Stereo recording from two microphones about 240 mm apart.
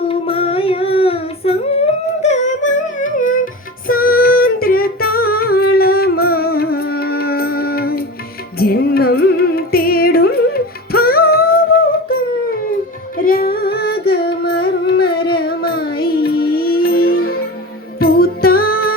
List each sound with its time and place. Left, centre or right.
0.1 s singing: left
2.2 s music: left